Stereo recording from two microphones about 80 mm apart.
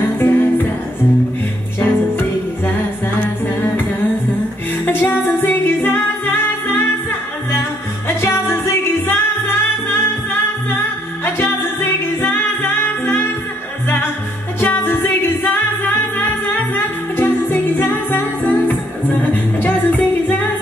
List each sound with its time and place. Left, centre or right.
0.0 s music: left
1.8 s music: left
4.8 s music: left
8.2 s music: left
11.2 s music: left
14.6 s music: left